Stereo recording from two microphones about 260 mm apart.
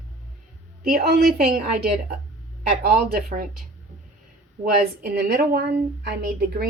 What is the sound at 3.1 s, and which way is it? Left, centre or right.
A woman's voice, right.